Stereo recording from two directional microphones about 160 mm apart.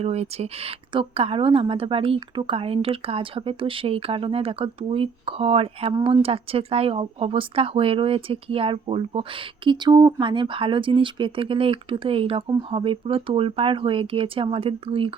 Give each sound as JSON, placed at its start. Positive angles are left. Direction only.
{"t": 0.0, "sound": "speech", "side_deg": -40}